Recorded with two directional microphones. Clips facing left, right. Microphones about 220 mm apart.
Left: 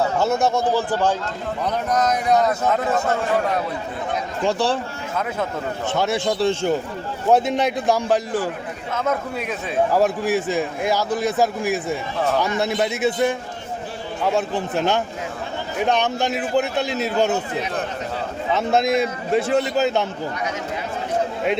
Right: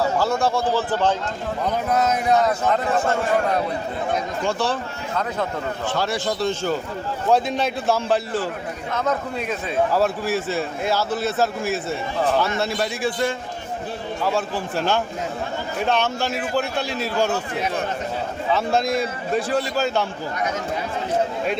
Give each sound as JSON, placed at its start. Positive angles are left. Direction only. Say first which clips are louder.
{"t": 0.2, "sound": "a man's voice", "louder": "left 2 dB", "side_deg": 20}
{"t": 1.6, "sound": "speech", "louder": "even", "side_deg": -5}
{"t": 4.4, "sound": "speech", "louder": "left 4 dB", "side_deg": 35}
{"t": 5.9, "sound": "a man's voice", "louder": "left 4 dB", "side_deg": 20}
{"t": 9.9, "sound": "a man's voice", "louder": "left 2 dB", "side_deg": 15}
{"t": 18.5, "sound": "a man's voice", "louder": "left 2 dB", "side_deg": 20}